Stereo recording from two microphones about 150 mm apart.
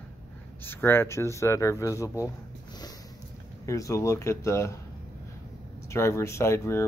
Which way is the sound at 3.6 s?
20° left (ahead or behind).